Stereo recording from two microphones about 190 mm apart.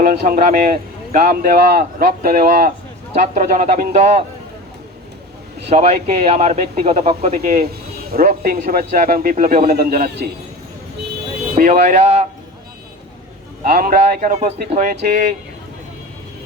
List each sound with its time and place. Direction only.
0.0 s a man's voice: 45° right (ahead or behind)
5.6 s speech: 30° right (ahead or behind)
8.1 s a man's voice: 45° right (ahead or behind)
11.5 s speech: 40° right (ahead or behind)
13.7 s a man's voice: 45° right (ahead or behind)